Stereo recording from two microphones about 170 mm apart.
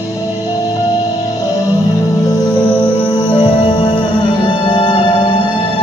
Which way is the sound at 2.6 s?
5° left (ahead or behind).